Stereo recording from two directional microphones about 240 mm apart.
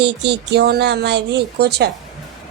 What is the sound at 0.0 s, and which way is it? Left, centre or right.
Speech, right.